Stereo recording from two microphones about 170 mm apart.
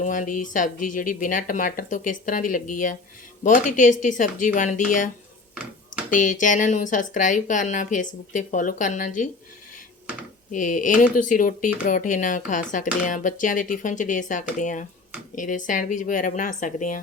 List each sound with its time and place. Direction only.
0.0 s speech: 50° left (ahead or behind)
10.5 s speech: 50° left (ahead or behind)